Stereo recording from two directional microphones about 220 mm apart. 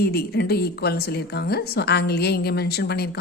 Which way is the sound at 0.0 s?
45° left (ahead or behind).